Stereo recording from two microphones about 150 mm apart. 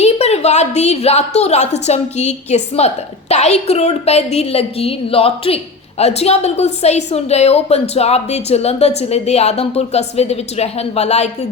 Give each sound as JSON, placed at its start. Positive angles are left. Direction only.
{"t": 0.0, "sound": "a woman's voice", "side_deg": 45}